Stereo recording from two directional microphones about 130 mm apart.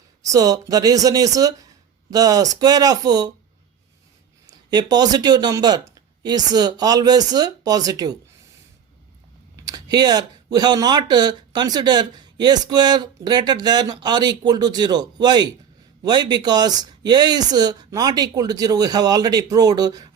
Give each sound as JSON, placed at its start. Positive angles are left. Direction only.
{"t": 0.3, "sound": "speech", "side_deg": -30}
{"t": 4.4, "sound": "speech", "side_deg": -35}
{"t": 9.6, "sound": "speech", "side_deg": -30}